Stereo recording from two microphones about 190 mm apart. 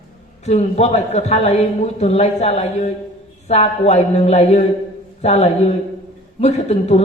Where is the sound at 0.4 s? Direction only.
35° left (ahead or behind).